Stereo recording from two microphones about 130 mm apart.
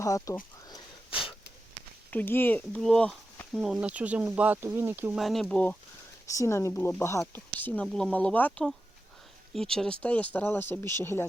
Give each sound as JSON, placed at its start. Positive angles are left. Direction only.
{"t": 0.0, "sound": "speech", "side_deg": 25}
{"t": 0.7, "sound": "wheeze", "side_deg": 40}
{"t": 2.0, "sound": "speech", "side_deg": 15}
{"t": 5.1, "sound": "speech", "side_deg": 0}
{"t": 6.2, "sound": "speech", "side_deg": 25}